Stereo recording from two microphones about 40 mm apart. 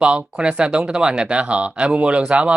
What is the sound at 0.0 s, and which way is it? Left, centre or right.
Speech, right.